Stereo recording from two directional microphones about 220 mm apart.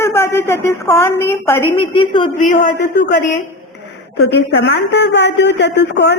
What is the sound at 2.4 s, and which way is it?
Speech, 35° left (ahead or behind).